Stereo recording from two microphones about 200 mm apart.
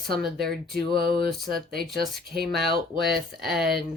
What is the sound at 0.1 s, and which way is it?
Speech, centre (ahead or behind).